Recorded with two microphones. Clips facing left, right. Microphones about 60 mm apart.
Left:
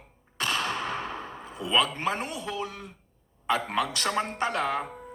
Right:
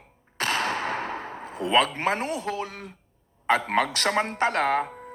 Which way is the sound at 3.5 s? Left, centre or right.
Right.